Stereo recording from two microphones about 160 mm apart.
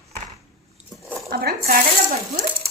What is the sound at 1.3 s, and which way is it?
Speech, 75° right (ahead or behind).